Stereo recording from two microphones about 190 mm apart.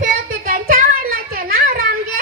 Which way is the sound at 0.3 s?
45° right (ahead or behind).